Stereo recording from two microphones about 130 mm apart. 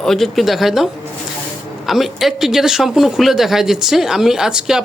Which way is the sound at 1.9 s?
Centre (ahead or behind).